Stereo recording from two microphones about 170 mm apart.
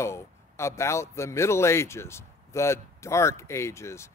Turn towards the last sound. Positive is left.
turn(degrees=15)  # may be behind; listen again after turning